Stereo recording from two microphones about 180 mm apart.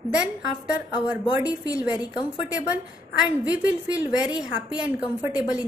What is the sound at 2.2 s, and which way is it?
A woman's voice, 10° right (ahead or behind).